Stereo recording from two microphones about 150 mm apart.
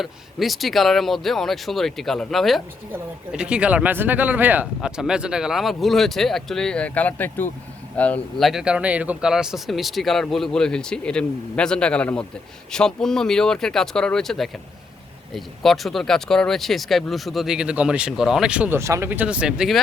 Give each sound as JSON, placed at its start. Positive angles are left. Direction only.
{"t": 0.0, "sound": "speech", "side_deg": 0}
{"t": 18.8, "sound": "speech", "side_deg": -20}